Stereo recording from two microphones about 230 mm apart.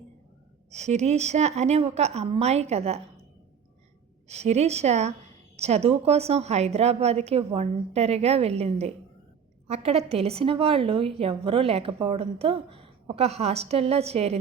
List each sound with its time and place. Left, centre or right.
0.7 s a woman's voice: right
4.3 s a woman's voice: right